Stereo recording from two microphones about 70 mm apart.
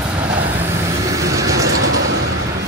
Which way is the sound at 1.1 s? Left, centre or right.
Right.